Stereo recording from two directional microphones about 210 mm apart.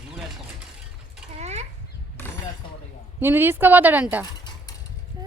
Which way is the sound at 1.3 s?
30° right (ahead or behind).